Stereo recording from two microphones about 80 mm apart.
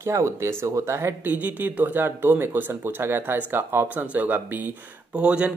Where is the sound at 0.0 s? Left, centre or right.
Right.